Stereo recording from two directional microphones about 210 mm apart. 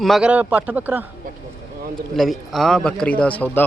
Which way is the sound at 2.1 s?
Centre (ahead or behind).